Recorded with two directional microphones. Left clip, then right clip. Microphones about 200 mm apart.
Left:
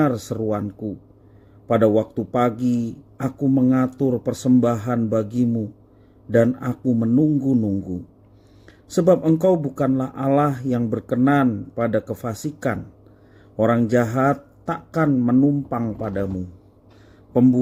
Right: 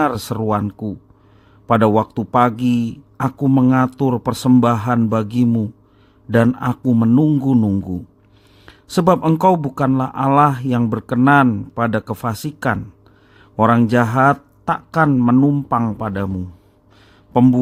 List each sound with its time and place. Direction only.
0.0 s speech: 55° right (ahead or behind)
8.6 s speech: 50° right (ahead or behind)
17.3 s speech: 55° right (ahead or behind)